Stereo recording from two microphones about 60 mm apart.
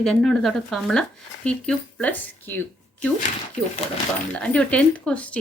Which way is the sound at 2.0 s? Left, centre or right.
Left.